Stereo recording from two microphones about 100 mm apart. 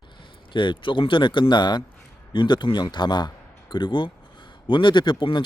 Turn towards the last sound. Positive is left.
turn(degrees=55)  # may be behind; listen again after turning